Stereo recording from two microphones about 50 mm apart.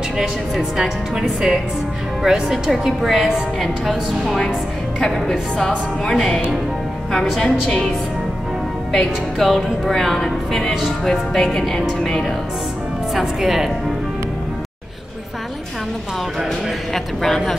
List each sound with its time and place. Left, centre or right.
0.2 s a woman's voice: centre
8.9 s speech: centre
13.1 s a woman's voice: centre
16.9 s speech: centre